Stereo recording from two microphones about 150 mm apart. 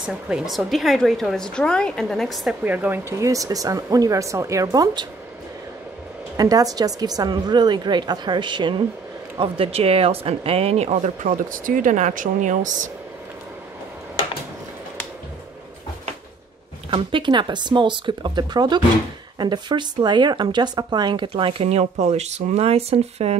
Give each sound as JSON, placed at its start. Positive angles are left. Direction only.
{"t": 0.0, "sound": "a woman's voice", "side_deg": -5}
{"t": 2.6, "sound": "a woman's voice", "side_deg": -10}
{"t": 6.3, "sound": "a woman's voice", "side_deg": -25}
{"t": 16.9, "sound": "speech", "side_deg": -35}